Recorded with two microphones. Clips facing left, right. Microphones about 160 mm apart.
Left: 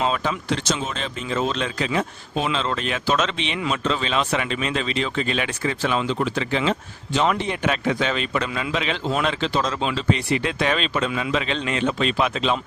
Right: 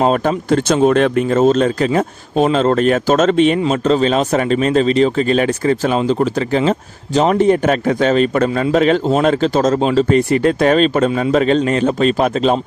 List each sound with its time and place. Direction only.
0.0 s speech: 50° right (ahead or behind)